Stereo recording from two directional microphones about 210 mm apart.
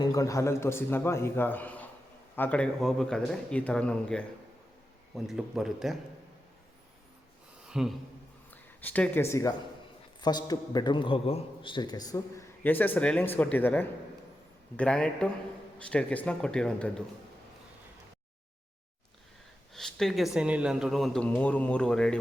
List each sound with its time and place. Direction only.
0.0 s a man's voice: 15° left (ahead or behind); by 6.0 s centre (ahead or behind)
7.7 s speech: centre (ahead or behind)
8.4 s a man's voice: 10° left (ahead or behind)
19.7 s speech: centre (ahead or behind)